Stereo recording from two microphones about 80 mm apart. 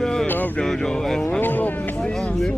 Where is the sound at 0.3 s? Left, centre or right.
Left.